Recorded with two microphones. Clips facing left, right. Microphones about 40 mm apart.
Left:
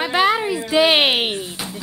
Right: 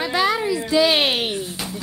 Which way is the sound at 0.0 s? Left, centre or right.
Left.